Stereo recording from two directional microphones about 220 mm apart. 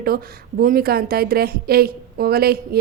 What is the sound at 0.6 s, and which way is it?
A woman's voice, 40° right (ahead or behind).